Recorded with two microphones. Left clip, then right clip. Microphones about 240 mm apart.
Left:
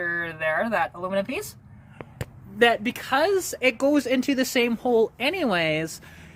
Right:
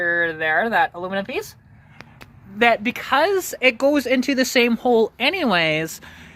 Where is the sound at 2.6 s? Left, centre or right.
Centre.